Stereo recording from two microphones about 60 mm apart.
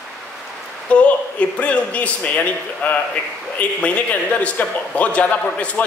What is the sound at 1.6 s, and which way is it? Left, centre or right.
Speech, left.